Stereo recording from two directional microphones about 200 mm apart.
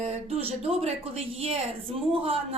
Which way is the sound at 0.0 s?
30° right (ahead or behind).